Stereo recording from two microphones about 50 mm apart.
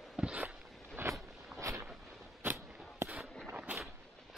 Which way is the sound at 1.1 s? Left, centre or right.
Right.